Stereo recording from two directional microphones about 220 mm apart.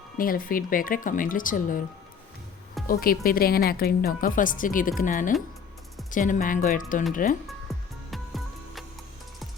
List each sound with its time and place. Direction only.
0.2 s speech: 40° left (ahead or behind)
2.8 s speech: 40° left (ahead or behind)
7.4 s music: centre (ahead or behind)